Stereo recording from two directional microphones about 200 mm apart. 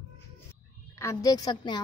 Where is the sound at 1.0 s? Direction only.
15° left (ahead or behind).